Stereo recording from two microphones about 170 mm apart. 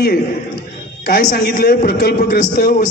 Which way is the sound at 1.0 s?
55° left (ahead or behind).